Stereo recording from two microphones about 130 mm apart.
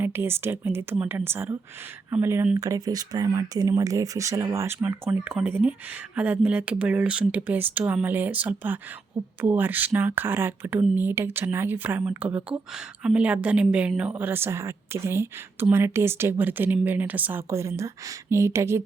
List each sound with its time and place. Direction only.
0.0 s speech: 20° right (ahead or behind)